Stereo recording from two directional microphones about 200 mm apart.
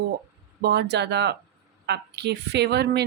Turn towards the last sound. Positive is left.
turn(degrees=-55)  # may be behind; listen again after turning